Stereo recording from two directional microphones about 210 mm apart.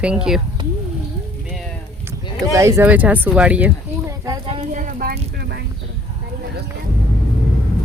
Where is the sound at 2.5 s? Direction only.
15° right (ahead or behind).